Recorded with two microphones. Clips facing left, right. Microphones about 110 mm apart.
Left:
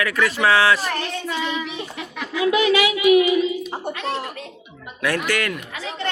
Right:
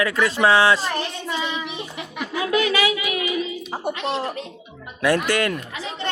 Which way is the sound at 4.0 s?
25° right (ahead or behind).